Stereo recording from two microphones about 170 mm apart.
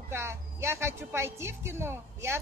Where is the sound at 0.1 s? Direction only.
15° right (ahead or behind).